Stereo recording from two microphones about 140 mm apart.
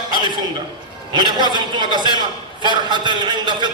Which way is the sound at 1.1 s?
30° right (ahead or behind).